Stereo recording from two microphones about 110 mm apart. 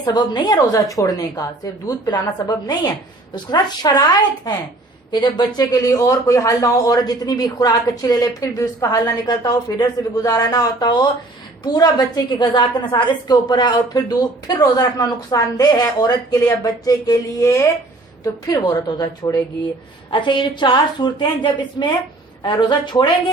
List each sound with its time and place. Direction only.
0.0 s a woman's voice: 35° left (ahead or behind)
18.4 s a woman's voice: 35° left (ahead or behind)